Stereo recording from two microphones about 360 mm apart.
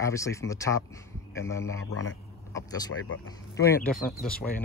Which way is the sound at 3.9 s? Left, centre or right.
Left.